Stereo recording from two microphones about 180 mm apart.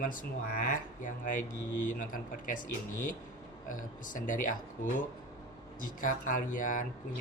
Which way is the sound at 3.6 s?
45° left (ahead or behind).